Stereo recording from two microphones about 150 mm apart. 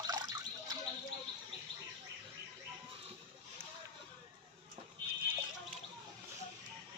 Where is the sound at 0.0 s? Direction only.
25° right (ahead or behind).